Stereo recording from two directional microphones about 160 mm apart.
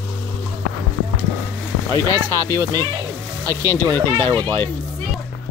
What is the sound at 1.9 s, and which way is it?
Speech, 20° right (ahead or behind).